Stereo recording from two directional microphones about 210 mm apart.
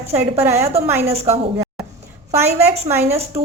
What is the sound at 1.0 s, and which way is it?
Speech, 30° right (ahead or behind).